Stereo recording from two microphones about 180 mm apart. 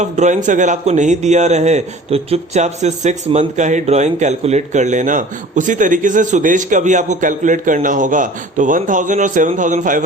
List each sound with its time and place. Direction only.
0.0 s speech: 40° right (ahead or behind)